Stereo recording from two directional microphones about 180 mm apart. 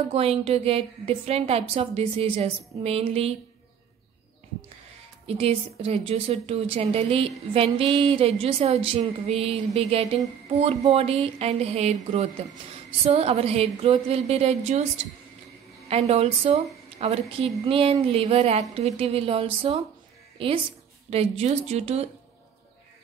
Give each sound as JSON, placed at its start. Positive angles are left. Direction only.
{"t": 0.1, "sound": "a woman's voice", "side_deg": -35}
{"t": 5.2, "sound": "a woman's voice", "side_deg": -30}
{"t": 15.9, "sound": "a woman's voice", "side_deg": -35}